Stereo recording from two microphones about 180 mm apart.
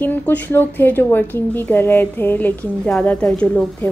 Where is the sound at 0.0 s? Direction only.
10° left (ahead or behind).